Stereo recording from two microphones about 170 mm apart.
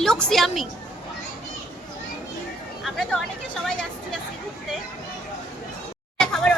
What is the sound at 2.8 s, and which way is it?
Speech, centre (ahead or behind).